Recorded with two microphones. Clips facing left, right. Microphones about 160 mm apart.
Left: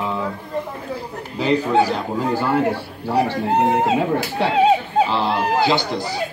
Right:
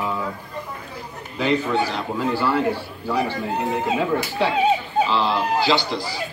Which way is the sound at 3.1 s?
65° left (ahead or behind).